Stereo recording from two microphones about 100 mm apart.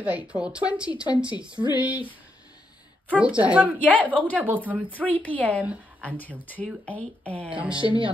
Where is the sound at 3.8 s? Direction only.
15° left (ahead or behind).